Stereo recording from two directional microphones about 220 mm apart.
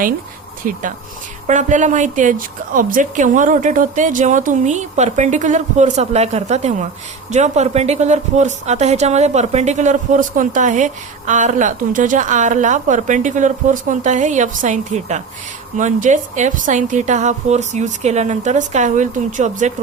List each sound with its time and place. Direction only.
0.6 s a woman's voice: 35° right (ahead or behind)